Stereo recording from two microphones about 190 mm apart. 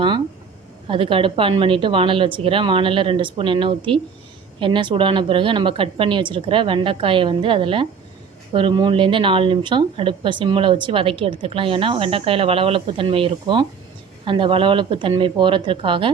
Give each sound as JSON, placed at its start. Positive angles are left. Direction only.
{"t": 0.9, "sound": "speech", "side_deg": -25}